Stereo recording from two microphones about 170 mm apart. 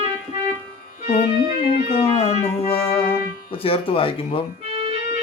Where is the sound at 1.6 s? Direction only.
35° left (ahead or behind).